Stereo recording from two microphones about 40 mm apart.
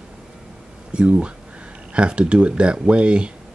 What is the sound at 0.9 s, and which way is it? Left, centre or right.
Speech, right.